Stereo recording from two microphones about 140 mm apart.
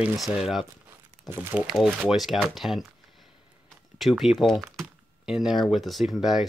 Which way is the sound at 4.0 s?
Centre (ahead or behind).